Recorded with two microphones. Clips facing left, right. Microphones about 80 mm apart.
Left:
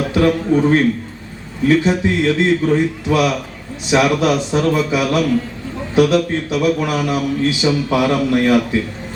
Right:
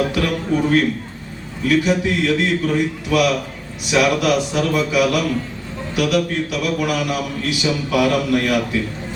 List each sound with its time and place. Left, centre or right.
0.1 s a man's voice: left